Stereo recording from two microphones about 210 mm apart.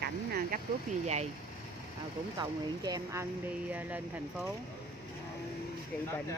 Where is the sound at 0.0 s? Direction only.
45° right (ahead or behind).